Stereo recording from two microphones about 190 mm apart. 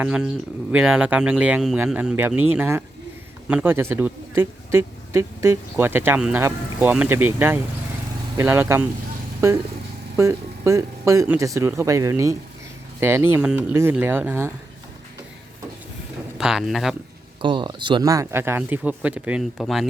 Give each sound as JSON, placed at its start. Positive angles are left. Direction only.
{"t": 0.0, "sound": "speech", "side_deg": -5}
{"t": 16.4, "sound": "speech", "side_deg": 0}
{"t": 17.4, "sound": "speech", "side_deg": -25}